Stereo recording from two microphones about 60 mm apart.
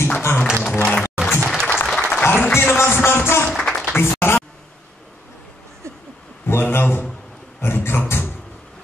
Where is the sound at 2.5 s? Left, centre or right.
Left.